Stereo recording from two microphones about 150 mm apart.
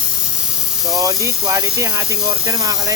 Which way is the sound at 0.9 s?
20° right (ahead or behind).